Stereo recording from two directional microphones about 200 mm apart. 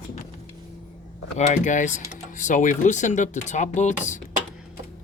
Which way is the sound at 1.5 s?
40° left (ahead or behind).